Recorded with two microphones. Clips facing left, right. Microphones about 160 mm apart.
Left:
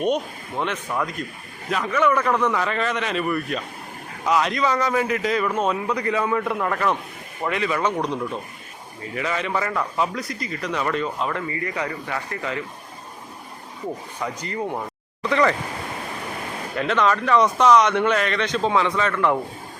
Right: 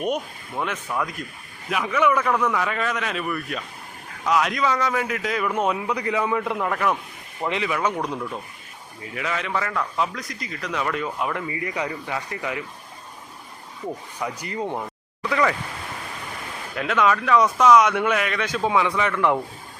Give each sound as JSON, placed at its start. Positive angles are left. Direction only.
{"t": 0.0, "sound": "a man's voice", "side_deg": -5}
{"t": 9.1, "sound": "speech", "side_deg": 0}
{"t": 14.2, "sound": "a man's voice", "side_deg": -15}
{"t": 16.7, "sound": "a man's voice", "side_deg": -5}